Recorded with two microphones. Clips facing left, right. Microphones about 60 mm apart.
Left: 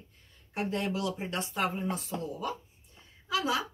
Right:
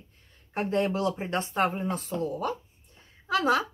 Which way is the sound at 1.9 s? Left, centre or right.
Right.